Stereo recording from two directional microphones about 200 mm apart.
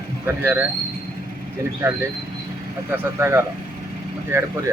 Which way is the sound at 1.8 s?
15° right (ahead or behind).